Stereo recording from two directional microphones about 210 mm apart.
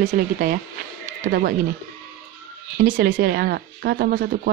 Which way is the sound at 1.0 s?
40° right (ahead or behind).